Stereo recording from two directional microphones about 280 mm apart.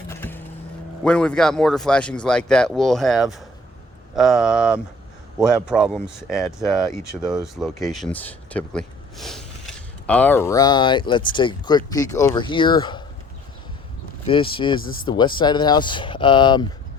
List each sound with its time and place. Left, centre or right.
0.1 s vehicle: centre
1.0 s speech: centre
6.9 s speech: centre
7.3 s speech: centre
14.3 s speech: centre